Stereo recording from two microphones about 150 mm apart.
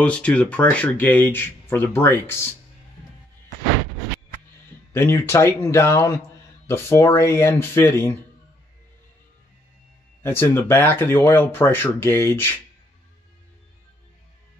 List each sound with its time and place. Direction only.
0.0 s speech: 10° left (ahead or behind)
4.9 s speech: 15° left (ahead or behind)
10.2 s speech: 15° left (ahead or behind)